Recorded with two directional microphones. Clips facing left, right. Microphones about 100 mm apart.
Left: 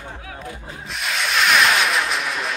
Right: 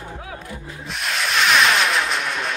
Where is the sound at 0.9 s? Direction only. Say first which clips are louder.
Even; centre (ahead or behind).